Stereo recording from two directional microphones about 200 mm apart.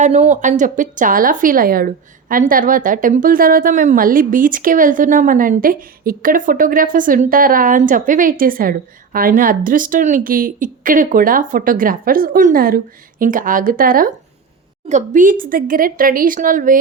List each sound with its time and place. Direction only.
0.0 s a woman's voice: 35° right (ahead or behind)